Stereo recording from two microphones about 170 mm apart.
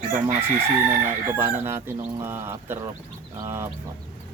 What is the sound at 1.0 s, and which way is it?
Speech, 15° right (ahead or behind).